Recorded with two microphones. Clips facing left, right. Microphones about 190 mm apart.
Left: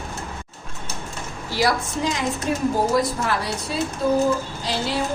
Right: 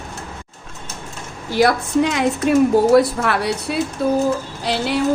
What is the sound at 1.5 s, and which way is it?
A woman's voice, 55° right (ahead or behind).